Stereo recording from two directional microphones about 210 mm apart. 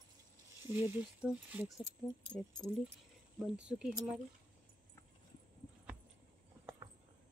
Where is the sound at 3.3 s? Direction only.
5° right (ahead or behind).